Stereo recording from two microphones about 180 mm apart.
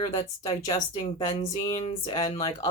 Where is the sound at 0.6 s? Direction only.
35° left (ahead or behind).